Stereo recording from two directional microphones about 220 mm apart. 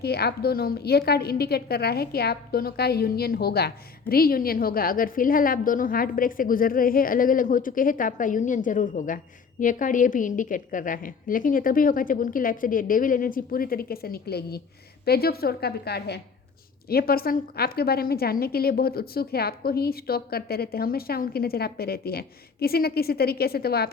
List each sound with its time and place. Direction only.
0.0 s a woman's voice: 45° left (ahead or behind)